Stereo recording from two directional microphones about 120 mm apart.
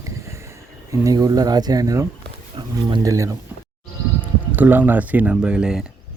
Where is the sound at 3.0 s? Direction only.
25° right (ahead or behind).